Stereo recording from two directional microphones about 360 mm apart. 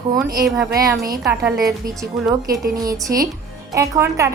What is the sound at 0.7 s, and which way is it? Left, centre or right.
A woman's voice, centre.